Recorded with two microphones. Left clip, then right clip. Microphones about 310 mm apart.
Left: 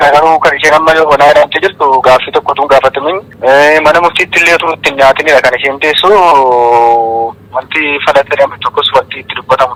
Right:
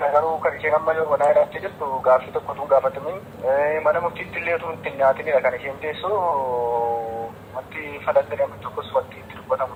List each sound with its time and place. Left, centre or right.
0.0 s speech: left